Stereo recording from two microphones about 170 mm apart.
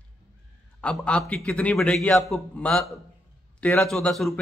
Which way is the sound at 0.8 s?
5° left (ahead or behind).